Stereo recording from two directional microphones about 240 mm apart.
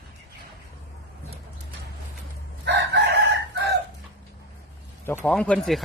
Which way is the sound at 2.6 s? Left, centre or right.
Right.